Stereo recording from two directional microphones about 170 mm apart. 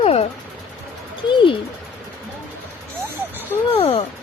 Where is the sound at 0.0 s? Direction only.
35° left (ahead or behind).